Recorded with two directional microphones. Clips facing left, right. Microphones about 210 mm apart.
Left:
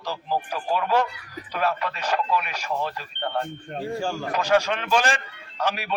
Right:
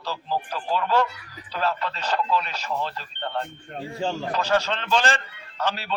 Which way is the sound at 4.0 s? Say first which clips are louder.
Right 6 dB; 20° right (ahead or behind).